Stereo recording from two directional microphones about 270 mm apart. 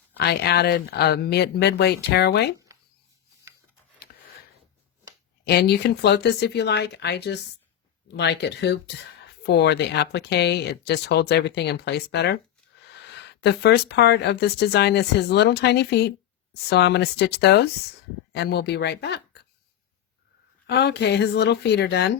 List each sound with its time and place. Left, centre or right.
0.2 s speech: left
5.5 s speech: left
20.7 s speech: left